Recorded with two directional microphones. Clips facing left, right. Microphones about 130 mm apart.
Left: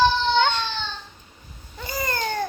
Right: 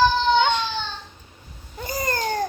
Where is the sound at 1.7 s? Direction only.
45° right (ahead or behind).